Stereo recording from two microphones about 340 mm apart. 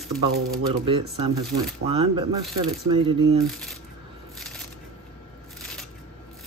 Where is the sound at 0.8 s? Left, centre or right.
Centre.